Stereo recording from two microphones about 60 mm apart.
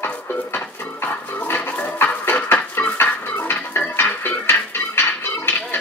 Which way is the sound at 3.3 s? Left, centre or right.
Left.